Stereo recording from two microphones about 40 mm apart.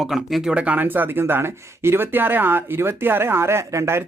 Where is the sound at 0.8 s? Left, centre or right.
Right.